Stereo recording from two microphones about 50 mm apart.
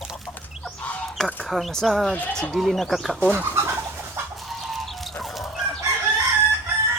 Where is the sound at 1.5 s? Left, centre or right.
Centre.